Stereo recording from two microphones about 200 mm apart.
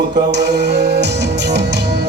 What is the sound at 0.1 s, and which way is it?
Music, 60° right (ahead or behind).